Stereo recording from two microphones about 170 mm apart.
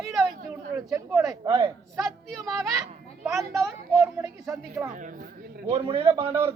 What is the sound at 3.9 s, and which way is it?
A man's voice, 20° right (ahead or behind).